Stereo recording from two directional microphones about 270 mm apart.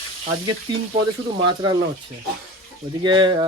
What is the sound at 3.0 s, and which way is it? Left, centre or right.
Speech, centre.